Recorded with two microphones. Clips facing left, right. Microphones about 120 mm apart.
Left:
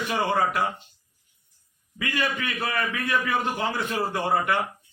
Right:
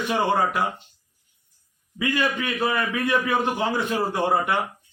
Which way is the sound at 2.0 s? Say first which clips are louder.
Right 4 dB; 20° right (ahead or behind).